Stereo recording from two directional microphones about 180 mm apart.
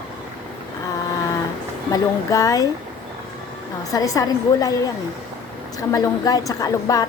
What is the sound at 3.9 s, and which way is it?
Speech, 20° left (ahead or behind).